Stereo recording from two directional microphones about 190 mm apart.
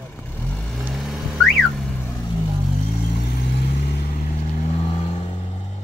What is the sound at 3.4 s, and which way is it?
Vehicle, 60° left (ahead or behind).